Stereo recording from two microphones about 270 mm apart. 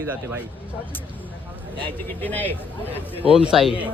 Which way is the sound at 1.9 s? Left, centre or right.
Centre.